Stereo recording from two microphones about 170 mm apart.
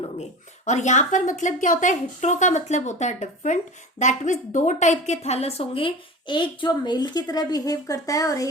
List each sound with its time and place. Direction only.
0.0 s speech: 40° left (ahead or behind); by 8.4 s 20° left (ahead or behind)